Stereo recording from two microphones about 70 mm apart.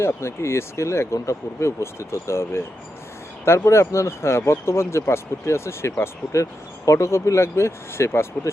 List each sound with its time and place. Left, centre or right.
0.0 s speech: left
3.7 s speech: left